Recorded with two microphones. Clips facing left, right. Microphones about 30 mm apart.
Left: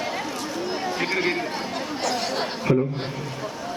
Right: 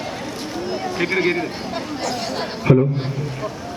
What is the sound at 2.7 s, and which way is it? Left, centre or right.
Speech, right.